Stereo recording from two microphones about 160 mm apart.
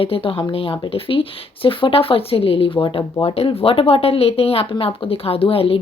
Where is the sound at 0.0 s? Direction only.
35° left (ahead or behind).